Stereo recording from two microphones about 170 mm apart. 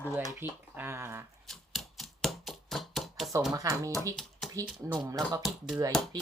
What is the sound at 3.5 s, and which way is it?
Speech, 20° right (ahead or behind).